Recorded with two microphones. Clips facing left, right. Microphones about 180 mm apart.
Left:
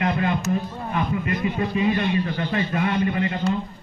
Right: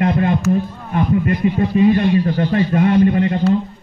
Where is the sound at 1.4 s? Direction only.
50° right (ahead or behind).